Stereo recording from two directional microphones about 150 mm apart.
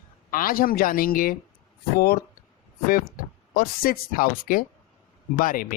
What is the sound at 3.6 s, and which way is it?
Speech, 70° left (ahead or behind).